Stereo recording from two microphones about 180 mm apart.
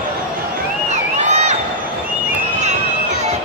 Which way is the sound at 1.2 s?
40° right (ahead or behind).